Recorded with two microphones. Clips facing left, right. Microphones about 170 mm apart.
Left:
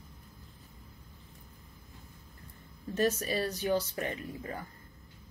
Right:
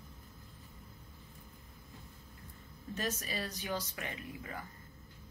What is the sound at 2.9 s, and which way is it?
Speech, 40° left (ahead or behind).